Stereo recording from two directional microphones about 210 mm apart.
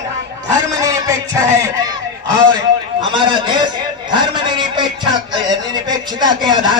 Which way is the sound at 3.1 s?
20° right (ahead or behind).